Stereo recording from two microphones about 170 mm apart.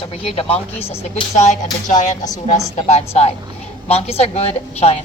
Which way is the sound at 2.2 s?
20° left (ahead or behind).